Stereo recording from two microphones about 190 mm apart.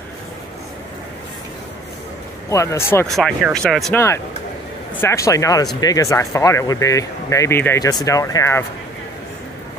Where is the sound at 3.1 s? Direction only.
Centre (ahead or behind).